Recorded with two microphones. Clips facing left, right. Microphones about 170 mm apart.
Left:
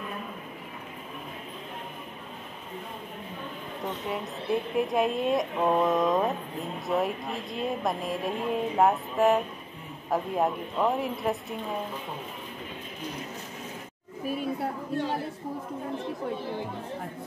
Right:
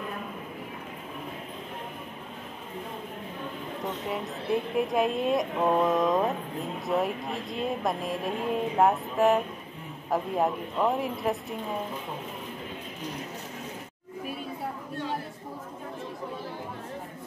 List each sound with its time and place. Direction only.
4.1 s speech: centre (ahead or behind)